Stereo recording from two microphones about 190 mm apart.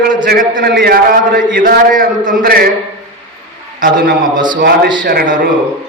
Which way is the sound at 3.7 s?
45° right (ahead or behind).